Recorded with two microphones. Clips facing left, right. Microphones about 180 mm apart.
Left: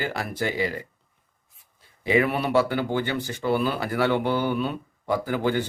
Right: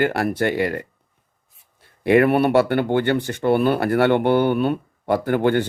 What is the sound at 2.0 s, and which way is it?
Speech, 60° right (ahead or behind).